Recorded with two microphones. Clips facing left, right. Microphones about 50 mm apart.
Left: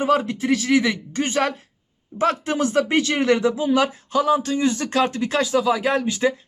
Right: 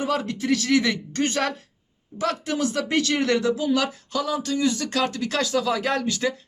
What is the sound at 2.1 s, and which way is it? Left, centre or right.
Speech, left.